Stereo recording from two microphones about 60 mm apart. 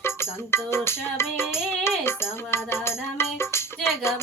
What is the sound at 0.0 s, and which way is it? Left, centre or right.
Music, left.